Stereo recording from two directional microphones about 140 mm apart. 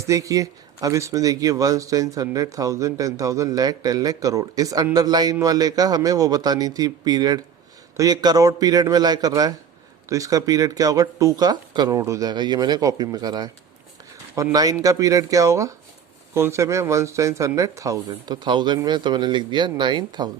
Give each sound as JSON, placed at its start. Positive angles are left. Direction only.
{"t": 0.0, "sound": "speech", "side_deg": -25}